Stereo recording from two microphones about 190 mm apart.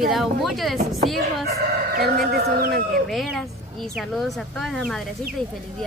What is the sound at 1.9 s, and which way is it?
Speech, 55° right (ahead or behind).